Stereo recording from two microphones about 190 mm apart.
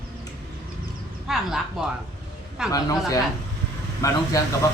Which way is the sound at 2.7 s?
20° left (ahead or behind).